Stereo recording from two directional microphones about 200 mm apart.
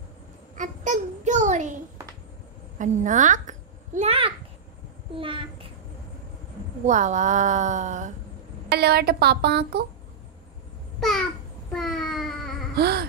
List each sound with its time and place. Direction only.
0.6 s a child's voice: 40° right (ahead or behind)
2.8 s a child's voice: 40° right (ahead or behind)
6.9 s a child's voice: 35° right (ahead or behind)
8.7 s speech: 50° right (ahead or behind)
11.0 s babbling: centre (ahead or behind)
11.7 s a sound: centre (ahead or behind)
12.7 s a sound: 55° right (ahead or behind)